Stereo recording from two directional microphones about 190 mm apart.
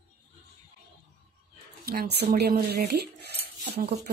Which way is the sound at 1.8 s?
55° right (ahead or behind).